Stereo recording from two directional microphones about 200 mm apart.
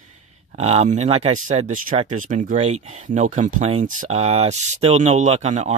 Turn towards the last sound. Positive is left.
turn(degrees=-35)  # may be behind; listen again after turning